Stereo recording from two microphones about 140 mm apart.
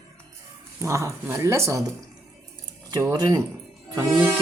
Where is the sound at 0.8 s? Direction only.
20° right (ahead or behind).